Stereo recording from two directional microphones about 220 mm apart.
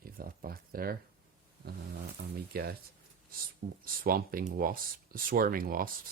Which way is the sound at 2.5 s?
45° right (ahead or behind).